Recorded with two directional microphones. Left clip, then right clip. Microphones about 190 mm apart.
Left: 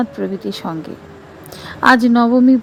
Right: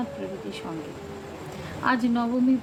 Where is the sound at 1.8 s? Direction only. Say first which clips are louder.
Left 13 dB; 45° left (ahead or behind).